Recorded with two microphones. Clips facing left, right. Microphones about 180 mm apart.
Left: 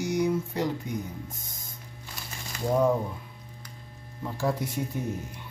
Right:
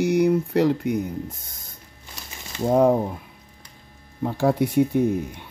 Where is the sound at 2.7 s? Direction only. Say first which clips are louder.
Right 6 dB; 55° right (ahead or behind).